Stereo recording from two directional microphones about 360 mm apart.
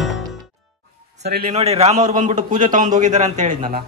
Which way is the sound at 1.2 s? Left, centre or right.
Right.